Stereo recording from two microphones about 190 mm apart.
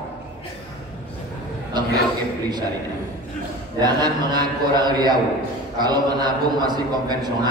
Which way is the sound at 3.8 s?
20° right (ahead or behind).